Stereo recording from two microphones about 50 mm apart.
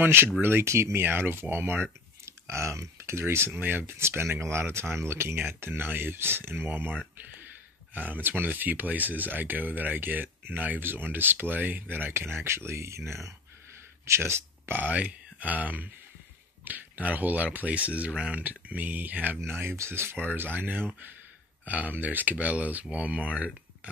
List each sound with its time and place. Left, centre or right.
0.0 s speech: right
1.0 s speech: right
2.2 s speech: right
7.9 s speech: right
14.8 s speech: right
19.4 s speech: right
20.2 s speech: right